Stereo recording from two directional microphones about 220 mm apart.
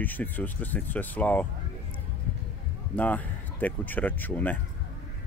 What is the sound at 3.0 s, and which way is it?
Speech, 5° left (ahead or behind).